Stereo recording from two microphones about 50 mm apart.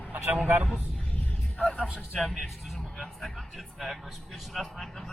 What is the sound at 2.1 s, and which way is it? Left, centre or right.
A man's voice, centre.